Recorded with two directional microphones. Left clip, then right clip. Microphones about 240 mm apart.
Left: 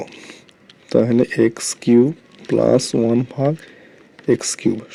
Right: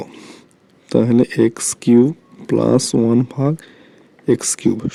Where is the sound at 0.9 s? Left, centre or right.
Right.